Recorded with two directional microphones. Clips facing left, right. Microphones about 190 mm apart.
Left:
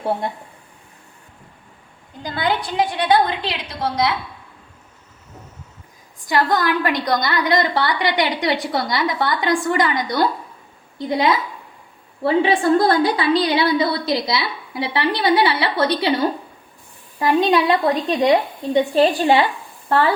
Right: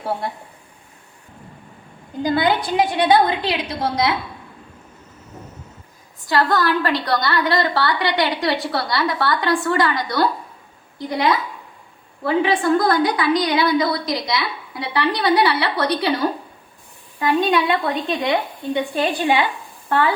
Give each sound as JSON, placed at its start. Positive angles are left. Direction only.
{"t": 2.2, "sound": "a woman's voice", "side_deg": -10}
{"t": 6.2, "sound": "a woman's voice", "side_deg": 20}
{"t": 17.2, "sound": "a woman's voice", "side_deg": 30}